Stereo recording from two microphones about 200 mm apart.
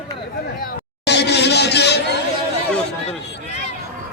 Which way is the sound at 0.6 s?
55° left (ahead or behind).